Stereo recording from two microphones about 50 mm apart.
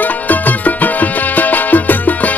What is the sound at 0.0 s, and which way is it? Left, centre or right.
Music, left.